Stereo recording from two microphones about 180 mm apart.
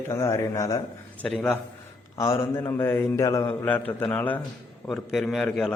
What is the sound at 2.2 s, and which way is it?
A man's voice, 15° left (ahead or behind).